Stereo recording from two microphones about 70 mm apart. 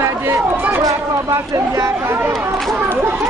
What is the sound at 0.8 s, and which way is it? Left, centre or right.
Speech, right.